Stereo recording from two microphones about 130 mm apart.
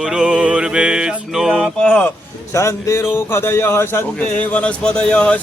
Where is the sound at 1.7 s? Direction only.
10° left (ahead or behind).